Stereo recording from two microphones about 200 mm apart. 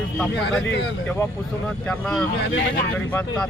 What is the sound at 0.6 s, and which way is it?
Speech, 60° left (ahead or behind).